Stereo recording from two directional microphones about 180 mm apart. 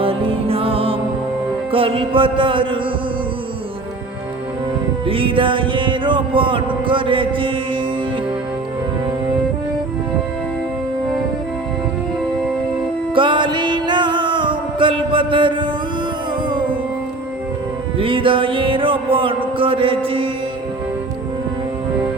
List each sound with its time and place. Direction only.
0.0 s music: 30° right (ahead or behind)
5.0 s music: 30° right (ahead or behind)
13.1 s music: 25° right (ahead or behind)
17.9 s music: 30° right (ahead or behind)